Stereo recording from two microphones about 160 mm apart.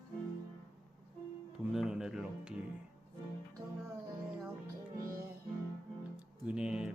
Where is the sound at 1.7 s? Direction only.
5° right (ahead or behind).